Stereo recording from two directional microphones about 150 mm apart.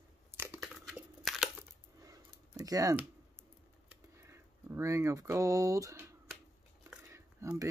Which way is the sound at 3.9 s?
15° right (ahead or behind).